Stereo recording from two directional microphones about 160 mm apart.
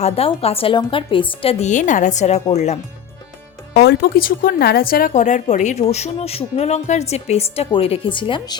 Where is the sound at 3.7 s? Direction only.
90° left; by 8.5 s 30° left (ahead or behind).